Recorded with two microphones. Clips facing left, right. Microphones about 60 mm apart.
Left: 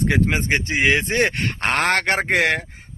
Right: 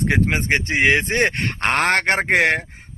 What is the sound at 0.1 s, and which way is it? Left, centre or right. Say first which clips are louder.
A man's voice: right 1 dB; right.